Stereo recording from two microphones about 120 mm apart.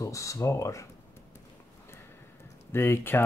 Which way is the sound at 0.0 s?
25° left (ahead or behind).